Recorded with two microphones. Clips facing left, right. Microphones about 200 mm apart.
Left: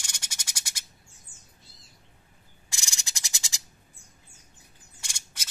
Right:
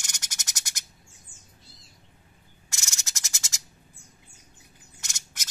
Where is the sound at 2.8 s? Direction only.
15° left (ahead or behind).